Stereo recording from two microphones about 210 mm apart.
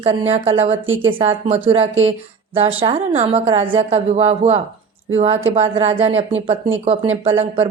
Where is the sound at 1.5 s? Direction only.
25° right (ahead or behind).